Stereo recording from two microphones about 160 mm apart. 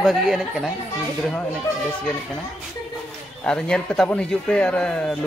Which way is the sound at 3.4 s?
5° left (ahead or behind).